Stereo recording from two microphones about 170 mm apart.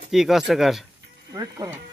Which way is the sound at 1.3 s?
20° right (ahead or behind).